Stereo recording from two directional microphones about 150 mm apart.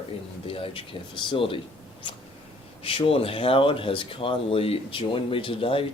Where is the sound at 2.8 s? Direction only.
40° left (ahead or behind).